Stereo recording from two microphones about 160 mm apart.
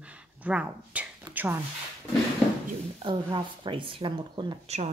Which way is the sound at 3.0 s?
30° right (ahead or behind).